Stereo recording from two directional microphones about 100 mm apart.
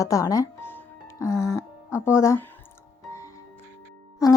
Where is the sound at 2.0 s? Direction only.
30° left (ahead or behind).